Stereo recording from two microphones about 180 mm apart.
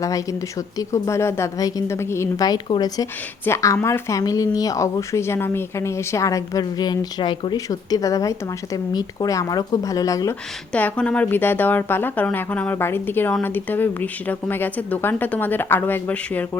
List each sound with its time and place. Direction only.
0.0 s a woman's voice: 20° left (ahead or behind)
10.7 s a woman's voice: 5° left (ahead or behind)